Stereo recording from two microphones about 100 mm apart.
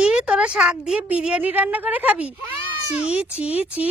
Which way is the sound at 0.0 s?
10° right (ahead or behind).